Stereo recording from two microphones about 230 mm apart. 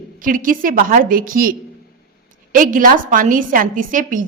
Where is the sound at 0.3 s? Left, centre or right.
Right.